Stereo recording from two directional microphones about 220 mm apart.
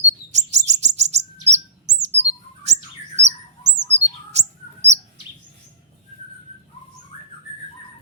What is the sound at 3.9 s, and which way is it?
Bird, 30° right (ahead or behind).